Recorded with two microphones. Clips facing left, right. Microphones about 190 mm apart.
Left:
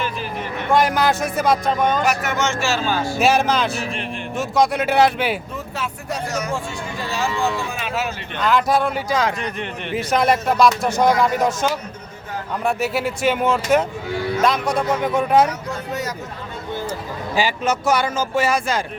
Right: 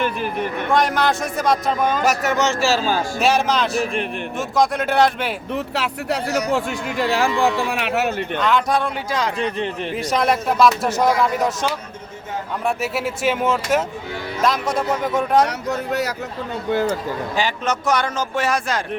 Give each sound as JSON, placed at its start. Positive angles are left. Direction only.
{"t": 0.0, "sound": "a sound", "side_deg": -55}
{"t": 0.7, "sound": "speech", "side_deg": 0}
{"t": 2.0, "sound": "speech", "side_deg": -35}
{"t": 3.2, "sound": "speech", "side_deg": 0}
{"t": 5.5, "sound": "speech", "side_deg": -70}
{"t": 7.7, "sound": "speech", "side_deg": -65}
{"t": 8.4, "sound": "speech", "side_deg": 0}
{"t": 12.6, "sound": "speech", "side_deg": 0}
{"t": 15.4, "sound": "speech", "side_deg": -70}
{"t": 17.3, "sound": "speech", "side_deg": 5}